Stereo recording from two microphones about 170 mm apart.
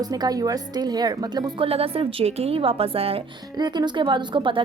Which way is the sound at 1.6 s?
35° right (ahead or behind).